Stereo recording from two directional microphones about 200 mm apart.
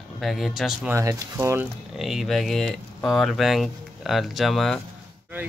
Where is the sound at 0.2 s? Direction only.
Centre (ahead or behind).